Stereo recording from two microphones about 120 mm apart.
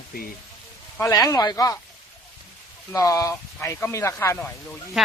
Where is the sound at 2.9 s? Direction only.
30° left (ahead or behind).